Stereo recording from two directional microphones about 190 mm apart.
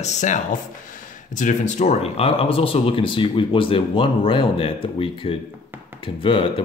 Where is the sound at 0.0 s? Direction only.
40° left (ahead or behind).